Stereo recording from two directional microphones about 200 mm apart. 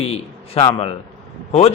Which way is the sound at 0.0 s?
30° left (ahead or behind).